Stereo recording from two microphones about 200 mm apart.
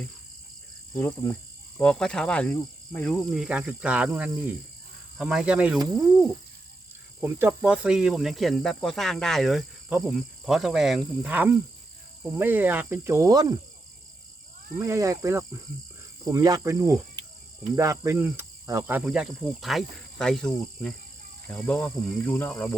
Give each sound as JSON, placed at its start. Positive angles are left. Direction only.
{"t": 0.9, "sound": "speech", "side_deg": 10}
{"t": 7.2, "sound": "speech", "side_deg": -10}
{"t": 12.2, "sound": "cricket", "side_deg": -10}
{"t": 14.8, "sound": "cricket", "side_deg": -15}
{"t": 17.7, "sound": "speech", "side_deg": -15}